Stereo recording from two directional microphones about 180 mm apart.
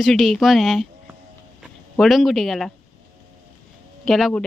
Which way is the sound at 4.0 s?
Centre (ahead or behind).